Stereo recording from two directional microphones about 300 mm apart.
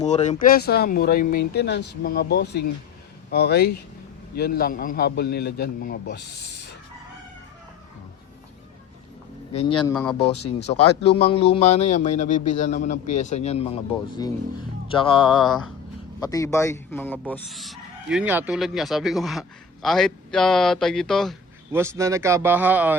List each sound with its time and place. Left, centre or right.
0.0 s a man's voice: left
6.5 s chicken: left
9.6 s speech: centre
9.9 s speech: centre
10.2 s a man's voice: centre
14.8 s speech: centre